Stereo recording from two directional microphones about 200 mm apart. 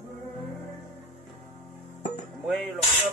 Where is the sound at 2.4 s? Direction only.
Centre (ahead or behind).